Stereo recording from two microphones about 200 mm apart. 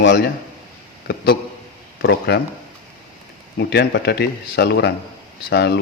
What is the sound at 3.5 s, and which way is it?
Speech, 60° left (ahead or behind).